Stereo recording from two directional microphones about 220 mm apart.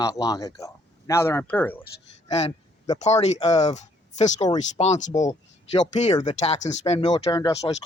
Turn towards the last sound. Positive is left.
turn(degrees=20)  # may be behind; listen again after turning